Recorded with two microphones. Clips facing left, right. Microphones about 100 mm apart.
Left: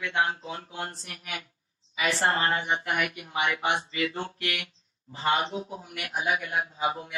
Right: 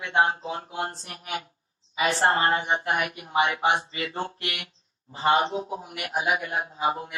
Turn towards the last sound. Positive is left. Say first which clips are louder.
# right 2 dB
turn(degrees=-35)  # may be behind; listen again after turning